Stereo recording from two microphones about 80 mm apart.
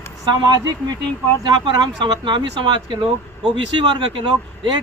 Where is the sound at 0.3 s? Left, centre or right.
Right.